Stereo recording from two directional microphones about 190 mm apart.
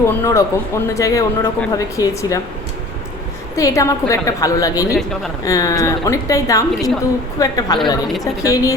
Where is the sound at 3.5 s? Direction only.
15° left (ahead or behind).